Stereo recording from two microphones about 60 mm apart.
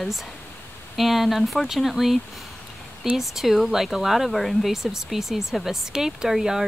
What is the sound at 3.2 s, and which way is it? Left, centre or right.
Speech, centre.